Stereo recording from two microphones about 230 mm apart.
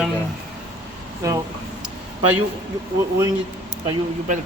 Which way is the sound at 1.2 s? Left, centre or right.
Centre.